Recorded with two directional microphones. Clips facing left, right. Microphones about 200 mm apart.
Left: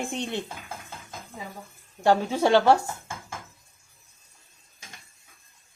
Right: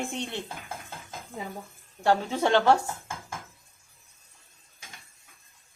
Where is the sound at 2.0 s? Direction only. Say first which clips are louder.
Left 3 dB; 10° left (ahead or behind).